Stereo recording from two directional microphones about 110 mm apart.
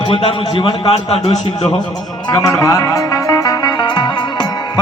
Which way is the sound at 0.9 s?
70° left (ahead or behind).